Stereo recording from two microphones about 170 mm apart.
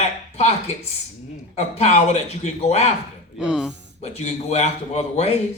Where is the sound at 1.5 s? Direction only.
40° left (ahead or behind).